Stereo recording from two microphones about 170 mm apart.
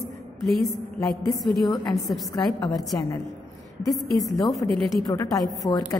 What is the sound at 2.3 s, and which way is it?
Speech, 25° left (ahead or behind).